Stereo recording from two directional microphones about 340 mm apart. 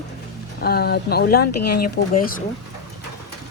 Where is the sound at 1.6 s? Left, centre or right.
Left.